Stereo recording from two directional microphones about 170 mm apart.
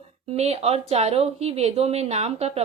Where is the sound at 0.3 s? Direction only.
40° right (ahead or behind).